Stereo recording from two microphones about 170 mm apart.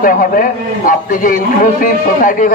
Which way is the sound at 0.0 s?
55° left (ahead or behind).